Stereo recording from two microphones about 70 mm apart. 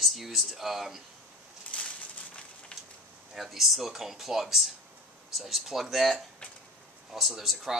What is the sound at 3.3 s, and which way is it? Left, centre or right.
Speech, centre.